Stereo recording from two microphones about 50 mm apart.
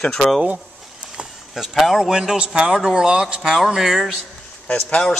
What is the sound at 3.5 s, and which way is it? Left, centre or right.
Speech, centre.